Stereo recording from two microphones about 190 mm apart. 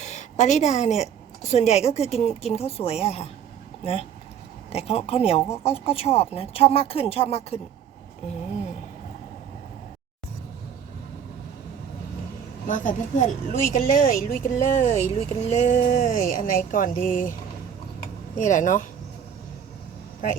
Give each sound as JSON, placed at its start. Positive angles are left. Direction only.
{"t": 0.0, "sound": "a woman's voice", "side_deg": 40}
{"t": 4.7, "sound": "speech", "side_deg": 30}
{"t": 12.6, "sound": "speech", "side_deg": 45}
{"t": 18.3, "sound": "speech", "side_deg": 40}